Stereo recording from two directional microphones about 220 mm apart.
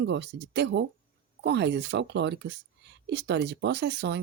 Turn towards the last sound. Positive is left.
turn(degrees=-50)  # may be behind; listen again after turning